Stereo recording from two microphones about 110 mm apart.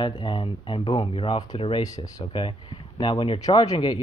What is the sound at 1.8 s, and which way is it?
Speech, 30° left (ahead or behind).